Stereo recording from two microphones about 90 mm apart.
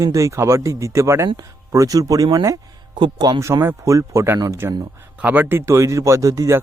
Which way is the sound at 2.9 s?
55° right (ahead or behind).